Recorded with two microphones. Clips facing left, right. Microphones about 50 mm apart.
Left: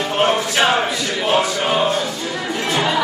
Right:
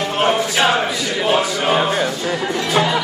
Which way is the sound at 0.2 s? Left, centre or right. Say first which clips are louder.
Even; centre.